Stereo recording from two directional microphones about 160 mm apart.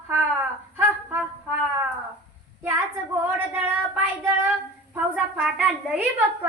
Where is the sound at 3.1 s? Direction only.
10° right (ahead or behind).